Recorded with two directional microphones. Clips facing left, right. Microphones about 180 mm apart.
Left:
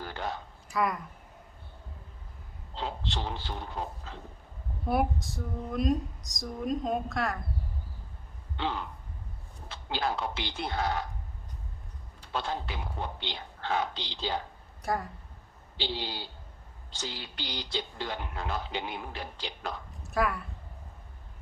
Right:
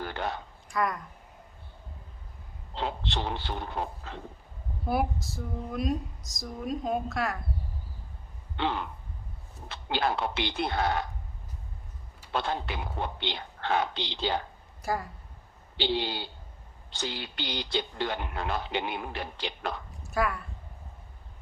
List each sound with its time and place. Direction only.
0.0 s a sound: 65° right (ahead or behind)
0.7 s speech: centre (ahead or behind)
2.7 s speech: 65° right (ahead or behind)
4.9 s speech: centre (ahead or behind)
8.5 s speech: 65° right (ahead or behind)
12.3 s speech: 65° right (ahead or behind)
14.8 s speech: centre (ahead or behind)
15.8 s speech: 65° right (ahead or behind)
20.1 s speech: centre (ahead or behind)